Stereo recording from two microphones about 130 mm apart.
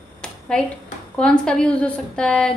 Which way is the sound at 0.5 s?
5° left (ahead or behind).